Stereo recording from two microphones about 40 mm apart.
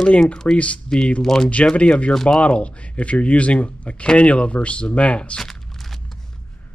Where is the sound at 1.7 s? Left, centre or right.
Left.